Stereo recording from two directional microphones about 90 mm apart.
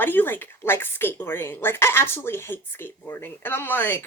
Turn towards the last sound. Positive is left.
turn(degrees=20)  # may be behind; listen again after turning